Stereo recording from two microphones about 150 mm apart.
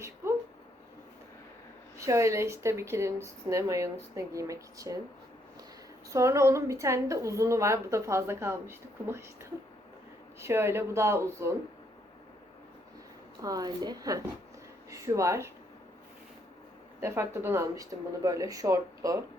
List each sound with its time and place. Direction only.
2.0 s a woman's voice: 20° right (ahead or behind)
6.1 s a woman's voice: 20° right (ahead or behind)
13.4 s a woman's voice: 25° right (ahead or behind)
17.0 s a woman's voice: 15° right (ahead or behind)